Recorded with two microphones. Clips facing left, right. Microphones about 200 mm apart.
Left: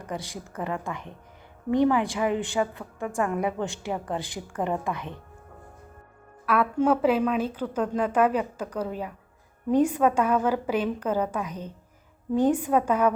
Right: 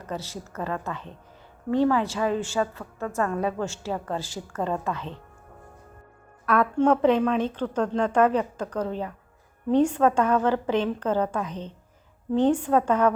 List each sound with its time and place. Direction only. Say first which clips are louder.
0.0 s a woman's voice: right 1 dB; 15° left (ahead or behind)
6.4 s a woman's voice: right 2 dB; 5° left (ahead or behind)